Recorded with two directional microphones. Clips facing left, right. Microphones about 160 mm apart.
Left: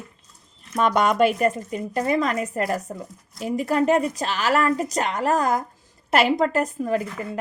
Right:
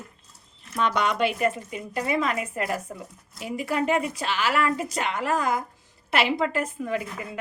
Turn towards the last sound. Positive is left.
turn(degrees=40)  # may be behind; listen again after turning